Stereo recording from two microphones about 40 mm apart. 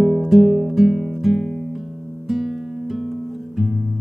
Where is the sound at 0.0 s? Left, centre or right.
Centre.